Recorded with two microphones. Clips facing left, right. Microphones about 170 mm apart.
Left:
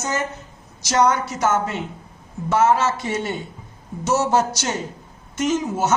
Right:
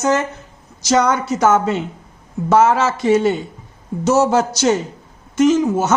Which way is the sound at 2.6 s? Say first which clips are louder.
Right 3 dB; 90° right.